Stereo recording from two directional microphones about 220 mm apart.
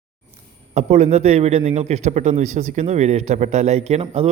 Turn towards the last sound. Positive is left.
turn(degrees=-25)  # may be behind; listen again after turning